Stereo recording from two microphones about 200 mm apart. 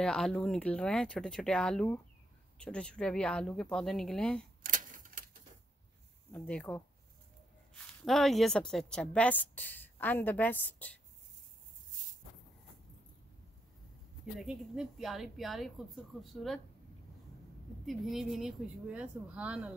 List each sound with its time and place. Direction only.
0.0 s speech: 5° left (ahead or behind)
4.6 s a sound: 40° right (ahead or behind)
6.3 s a woman's voice: 5° left (ahead or behind)
14.4 s speech: centre (ahead or behind)
17.8 s speech: centre (ahead or behind)